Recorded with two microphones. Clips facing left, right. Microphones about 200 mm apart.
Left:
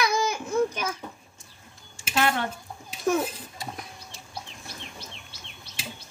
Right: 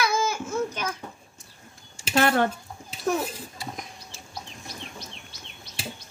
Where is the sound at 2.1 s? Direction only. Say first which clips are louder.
Right 4 dB; 45° right (ahead or behind).